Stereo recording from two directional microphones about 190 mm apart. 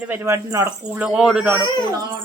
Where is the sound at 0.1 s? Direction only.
15° right (ahead or behind).